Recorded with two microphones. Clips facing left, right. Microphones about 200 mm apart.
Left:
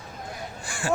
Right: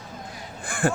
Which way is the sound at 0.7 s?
55° right (ahead or behind).